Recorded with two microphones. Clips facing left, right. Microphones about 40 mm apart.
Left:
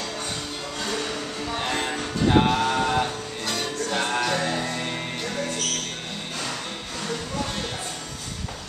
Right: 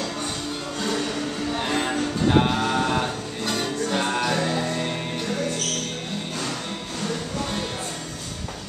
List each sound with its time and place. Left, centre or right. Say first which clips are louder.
0.7 s music: right 2 dB; centre